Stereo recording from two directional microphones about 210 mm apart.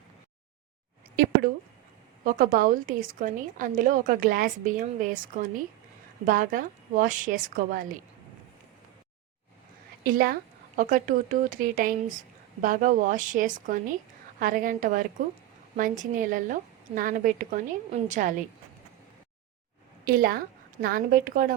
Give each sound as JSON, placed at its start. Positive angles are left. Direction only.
{"t": 2.2, "sound": "a woman's voice", "side_deg": -40}
{"t": 10.0, "sound": "a woman's voice", "side_deg": -45}
{"t": 20.1, "sound": "a woman's voice", "side_deg": -45}